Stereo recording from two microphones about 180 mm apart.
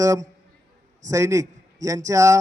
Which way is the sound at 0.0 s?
20° right (ahead or behind).